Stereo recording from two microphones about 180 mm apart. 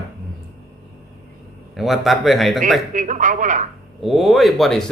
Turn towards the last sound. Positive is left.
turn(degrees=0)  # may be behind; listen again after turning